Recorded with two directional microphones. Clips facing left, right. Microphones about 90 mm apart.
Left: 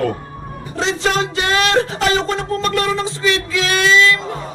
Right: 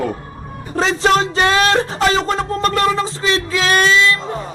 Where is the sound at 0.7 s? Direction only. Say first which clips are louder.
Right 4 dB; 40° right (ahead or behind).